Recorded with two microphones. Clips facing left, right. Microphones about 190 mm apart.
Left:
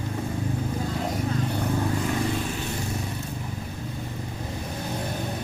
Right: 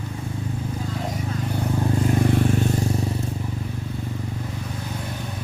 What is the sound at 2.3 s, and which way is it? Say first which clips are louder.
Vehicle: right 8 dB; 60° right (ahead or behind).